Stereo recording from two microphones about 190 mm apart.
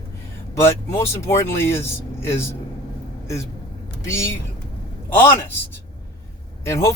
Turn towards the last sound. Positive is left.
turn(degrees=15)  # may be behind; listen again after turning